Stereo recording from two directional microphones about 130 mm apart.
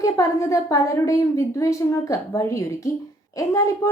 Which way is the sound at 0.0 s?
25° left (ahead or behind).